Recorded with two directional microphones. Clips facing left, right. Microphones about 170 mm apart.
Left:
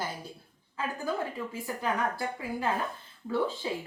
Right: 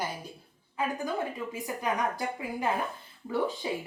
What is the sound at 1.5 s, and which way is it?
A woman's voice, 15° right (ahead or behind).